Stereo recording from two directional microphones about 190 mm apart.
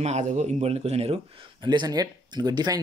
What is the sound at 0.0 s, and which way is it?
Speech, 35° right (ahead or behind).